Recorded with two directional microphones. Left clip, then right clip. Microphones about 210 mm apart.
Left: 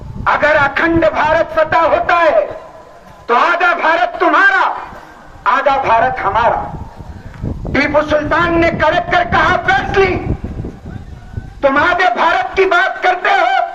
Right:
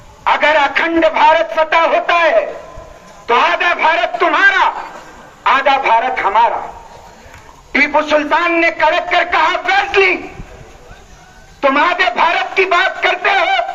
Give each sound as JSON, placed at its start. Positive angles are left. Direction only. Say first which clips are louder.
{"t": 0.3, "sound": "a man's voice", "louder": "even", "side_deg": 55}
{"t": 7.7, "sound": "a man's voice", "louder": "right 1 dB", "side_deg": 55}
{"t": 11.6, "sound": "a man's voice", "louder": "left 1 dB", "side_deg": 55}